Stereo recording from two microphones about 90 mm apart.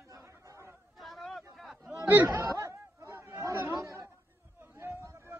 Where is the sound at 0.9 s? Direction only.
Centre (ahead or behind).